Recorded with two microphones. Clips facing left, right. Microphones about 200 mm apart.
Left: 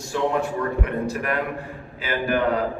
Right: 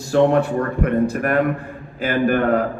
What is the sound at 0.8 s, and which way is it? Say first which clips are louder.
A man's voice: right 7 dB; 50° right (ahead or behind).